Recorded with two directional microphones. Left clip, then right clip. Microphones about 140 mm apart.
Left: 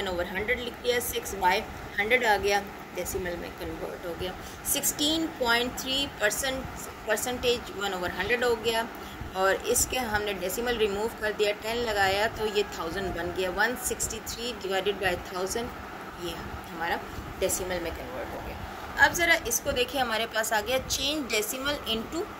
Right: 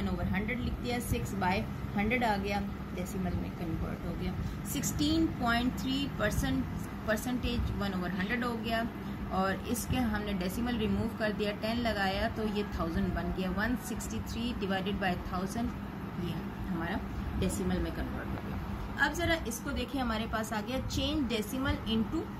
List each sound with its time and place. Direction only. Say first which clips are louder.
0.3 s speech: left 7 dB; 45° left (ahead or behind)
4.7 s speech: left 4 dB; 45° left (ahead or behind)
16.8 s speech: left 10 dB; 45° left (ahead or behind)
18.9 s speech: left 8 dB; 40° left (ahead or behind); by 22.0 s 60° left (ahead or behind)